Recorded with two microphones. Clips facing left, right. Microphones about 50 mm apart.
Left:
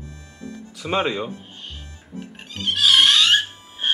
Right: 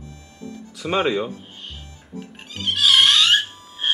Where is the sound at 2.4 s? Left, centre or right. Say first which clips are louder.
Even; centre.